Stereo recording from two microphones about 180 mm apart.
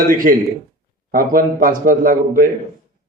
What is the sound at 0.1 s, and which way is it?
A man's voice, 50° right (ahead or behind).